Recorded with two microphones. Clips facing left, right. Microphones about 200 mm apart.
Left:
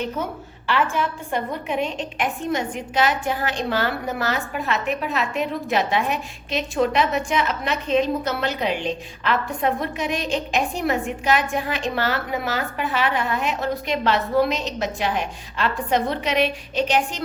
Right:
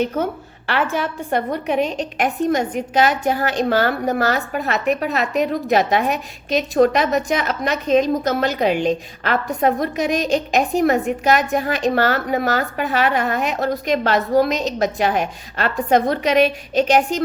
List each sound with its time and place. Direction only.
0.7 s a woman's voice: 65° right (ahead or behind)
1.8 s a woman's voice: 40° right (ahead or behind)